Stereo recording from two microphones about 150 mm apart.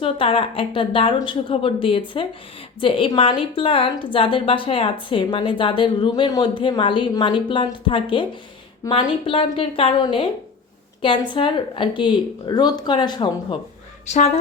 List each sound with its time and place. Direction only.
0.0 s a woman's voice: 35° left (ahead or behind)
8.8 s a woman's voice: 20° left (ahead or behind)
9.2 s a woman's voice: 35° left (ahead or behind)